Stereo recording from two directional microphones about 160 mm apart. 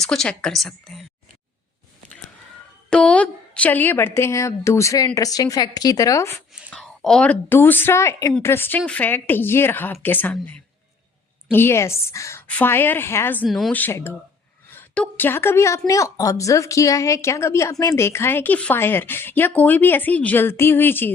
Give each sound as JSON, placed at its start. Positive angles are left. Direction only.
{"t": 0.0, "sound": "a woman's voice", "side_deg": 5}
{"t": 2.9, "sound": "a woman's voice", "side_deg": 5}
{"t": 6.7, "sound": "a woman's voice", "side_deg": 5}
{"t": 13.4, "sound": "a woman's voice", "side_deg": 0}
{"t": 13.7, "sound": "a woman's voice", "side_deg": 15}